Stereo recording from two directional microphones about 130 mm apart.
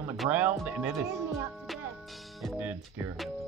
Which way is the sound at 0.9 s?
20° right (ahead or behind).